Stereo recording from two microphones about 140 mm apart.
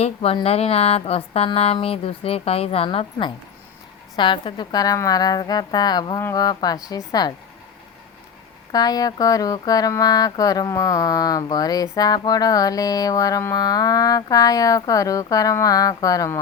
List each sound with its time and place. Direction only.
0.0 s speech: 45° left (ahead or behind); by 7.3 s 30° left (ahead or behind)
8.7 s speech: 25° left (ahead or behind)